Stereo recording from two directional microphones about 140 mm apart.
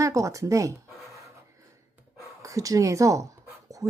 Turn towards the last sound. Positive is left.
turn(degrees=-25)  # may be behind; listen again after turning